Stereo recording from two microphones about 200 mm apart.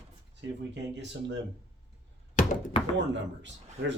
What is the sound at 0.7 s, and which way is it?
Speech, 60° right (ahead or behind).